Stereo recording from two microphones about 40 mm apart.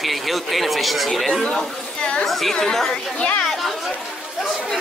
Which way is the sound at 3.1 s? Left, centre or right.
Left.